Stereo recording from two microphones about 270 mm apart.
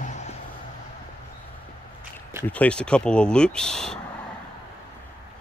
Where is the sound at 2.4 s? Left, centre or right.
Centre.